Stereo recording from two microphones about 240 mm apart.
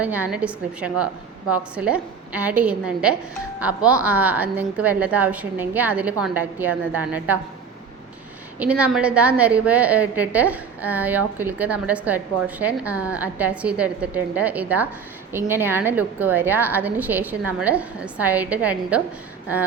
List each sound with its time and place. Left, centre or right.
0.0 s a woman's voice: centre
8.5 s a woman's voice: centre